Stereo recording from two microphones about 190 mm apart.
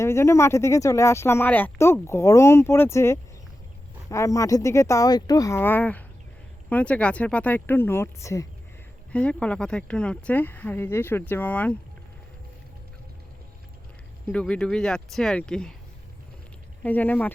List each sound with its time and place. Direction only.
0.0 s speech: 15° left (ahead or behind)
14.3 s speech: 5° left (ahead or behind)
16.8 s speech: 10° left (ahead or behind)